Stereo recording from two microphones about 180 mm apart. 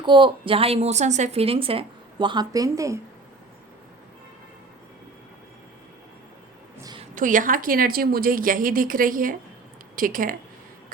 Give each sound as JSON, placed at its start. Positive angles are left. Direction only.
{"t": 0.0, "sound": "a woman's voice", "side_deg": -25}
{"t": 6.8, "sound": "a sound", "side_deg": -25}
{"t": 7.2, "sound": "a woman's voice", "side_deg": -45}